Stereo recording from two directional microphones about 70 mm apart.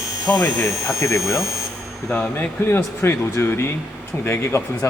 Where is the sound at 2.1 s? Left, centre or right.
Left.